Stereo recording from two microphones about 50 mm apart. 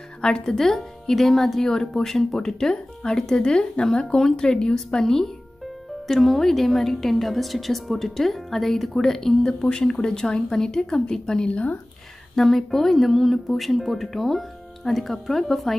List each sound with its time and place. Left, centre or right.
0.2 s a woman's voice: centre
12.4 s speech: centre